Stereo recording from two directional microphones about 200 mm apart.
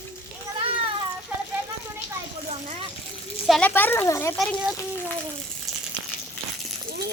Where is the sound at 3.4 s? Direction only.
5° left (ahead or behind).